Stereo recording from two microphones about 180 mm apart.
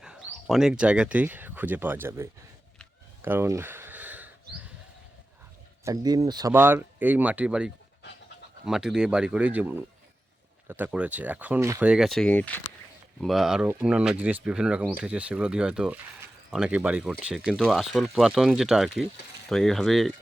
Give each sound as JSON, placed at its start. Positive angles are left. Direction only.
{"t": 0.0, "sound": "speech", "side_deg": -5}
{"t": 3.2, "sound": "a sound", "side_deg": -10}
{"t": 5.8, "sound": "speech", "side_deg": -20}